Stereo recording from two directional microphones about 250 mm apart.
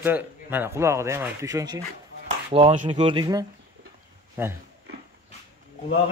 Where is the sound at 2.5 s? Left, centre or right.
Right.